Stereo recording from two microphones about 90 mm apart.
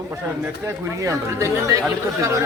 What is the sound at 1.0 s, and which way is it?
Speech, 35° right (ahead or behind).